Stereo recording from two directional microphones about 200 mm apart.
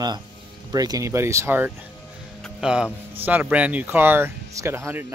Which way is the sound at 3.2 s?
10° right (ahead or behind).